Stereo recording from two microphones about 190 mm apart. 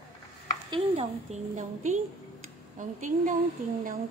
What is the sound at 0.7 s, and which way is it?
A woman's voice, 30° right (ahead or behind).